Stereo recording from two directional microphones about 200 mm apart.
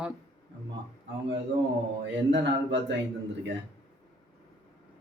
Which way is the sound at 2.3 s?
60° right (ahead or behind).